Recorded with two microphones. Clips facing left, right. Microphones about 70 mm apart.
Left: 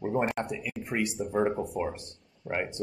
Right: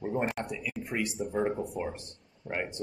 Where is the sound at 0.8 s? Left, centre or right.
Left.